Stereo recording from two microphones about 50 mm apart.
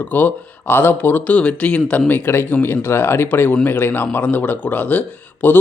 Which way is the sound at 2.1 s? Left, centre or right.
Left.